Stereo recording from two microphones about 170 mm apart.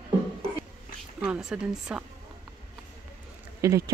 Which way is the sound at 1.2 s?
5° right (ahead or behind).